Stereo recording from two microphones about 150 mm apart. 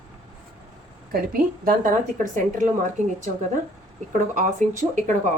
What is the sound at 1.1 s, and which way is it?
A woman's voice, 75° right (ahead or behind).